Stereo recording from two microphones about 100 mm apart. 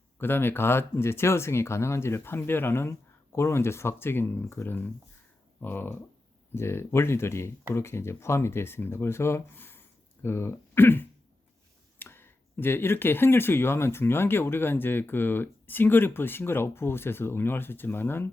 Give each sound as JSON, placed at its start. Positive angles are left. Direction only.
{"t": 0.2, "sound": "speech", "side_deg": 20}